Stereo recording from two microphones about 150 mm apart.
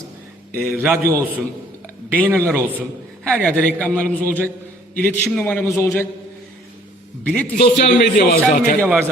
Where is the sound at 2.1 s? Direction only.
10° left (ahead or behind).